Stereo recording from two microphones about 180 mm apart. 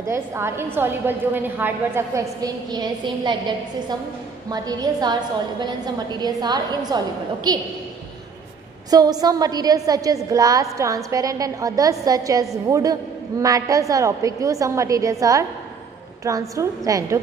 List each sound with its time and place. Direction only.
0.0 s a woman's voice: 15° right (ahead or behind)
8.9 s a woman's voice: 20° right (ahead or behind)